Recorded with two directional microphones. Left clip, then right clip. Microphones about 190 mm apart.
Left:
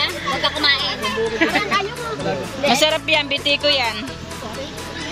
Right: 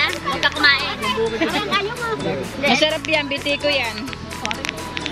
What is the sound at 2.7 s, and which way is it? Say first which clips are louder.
Speech: left 1 dB; centre (ahead or behind).